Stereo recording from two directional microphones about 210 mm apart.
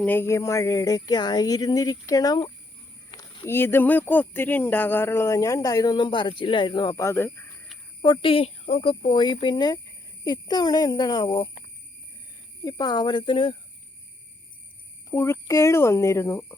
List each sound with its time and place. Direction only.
0.0 s speech: 10° left (ahead or behind)
8.0 s speech: 25° left (ahead or behind)
12.6 s speech: 20° left (ahead or behind)
15.1 s speech: 10° left (ahead or behind)